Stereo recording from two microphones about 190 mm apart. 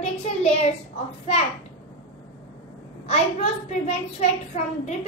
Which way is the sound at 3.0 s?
35° left (ahead or behind).